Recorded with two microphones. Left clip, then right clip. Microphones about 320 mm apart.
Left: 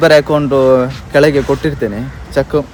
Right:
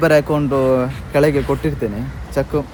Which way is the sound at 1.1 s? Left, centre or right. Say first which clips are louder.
Left 5 dB; centre.